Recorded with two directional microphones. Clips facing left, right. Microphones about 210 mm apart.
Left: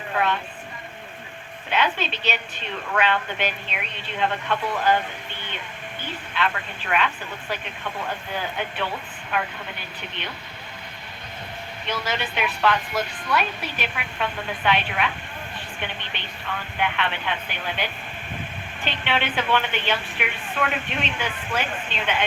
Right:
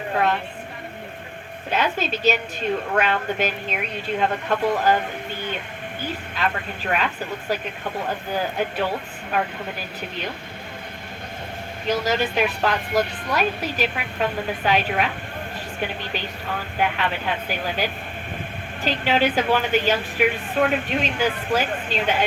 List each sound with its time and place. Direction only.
1.7 s a woman's voice: 40° right (ahead or behind)
6.4 s a woman's voice: 40° right (ahead or behind)
11.9 s a woman's voice: 40° right (ahead or behind)
18.9 s a woman's voice: 40° right (ahead or behind)